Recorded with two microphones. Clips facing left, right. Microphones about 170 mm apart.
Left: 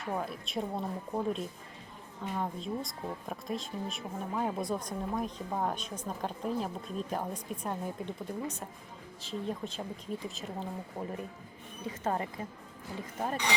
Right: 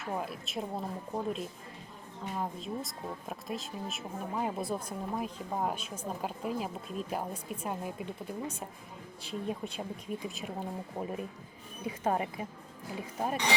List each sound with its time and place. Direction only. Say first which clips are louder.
0.0 s speech: left 1 dB; 5° right (ahead or behind)